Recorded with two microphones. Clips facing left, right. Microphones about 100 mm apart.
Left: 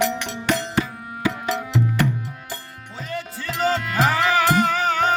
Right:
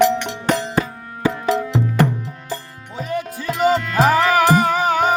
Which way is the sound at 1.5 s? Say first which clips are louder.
Right 4 dB; 40° right (ahead or behind).